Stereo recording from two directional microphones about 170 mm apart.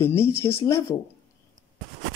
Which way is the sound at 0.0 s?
15° left (ahead or behind).